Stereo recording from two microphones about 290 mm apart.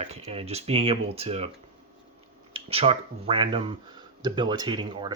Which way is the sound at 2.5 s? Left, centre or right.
Centre.